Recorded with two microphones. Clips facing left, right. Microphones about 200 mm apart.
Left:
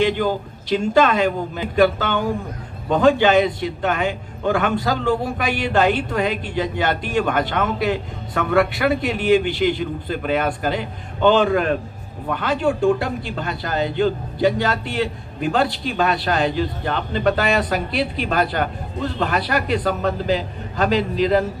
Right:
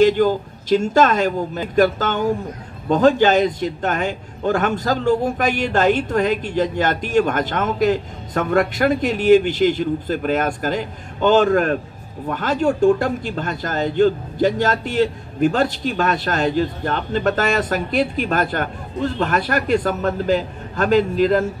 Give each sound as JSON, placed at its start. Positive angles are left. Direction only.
{"t": 0.0, "sound": "a man's voice", "side_deg": -45}